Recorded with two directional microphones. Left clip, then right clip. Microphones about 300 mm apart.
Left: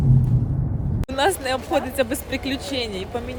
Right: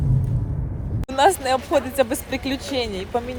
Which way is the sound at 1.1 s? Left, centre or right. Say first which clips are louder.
Right 4 dB; centre.